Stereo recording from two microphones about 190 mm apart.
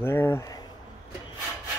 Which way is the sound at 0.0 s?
10° left (ahead or behind).